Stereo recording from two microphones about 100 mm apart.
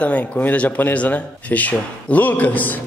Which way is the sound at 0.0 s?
15° left (ahead or behind).